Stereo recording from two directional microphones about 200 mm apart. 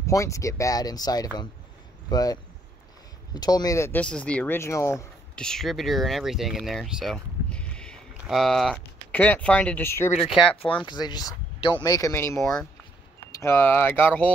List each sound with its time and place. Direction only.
0.0 s speech: 15° left (ahead or behind)
3.3 s speech: 20° left (ahead or behind)
10.9 s speech: 20° left (ahead or behind)